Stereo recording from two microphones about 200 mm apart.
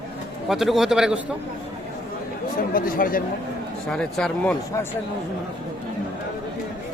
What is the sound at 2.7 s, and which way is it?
Speech, 45° left (ahead or behind).